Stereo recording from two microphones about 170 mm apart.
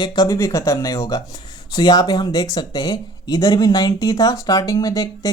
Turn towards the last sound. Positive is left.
turn(degrees=20)  # may be behind; listen again after turning